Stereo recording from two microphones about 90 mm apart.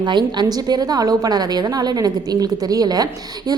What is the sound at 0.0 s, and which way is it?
A woman's voice, 55° right (ahead or behind).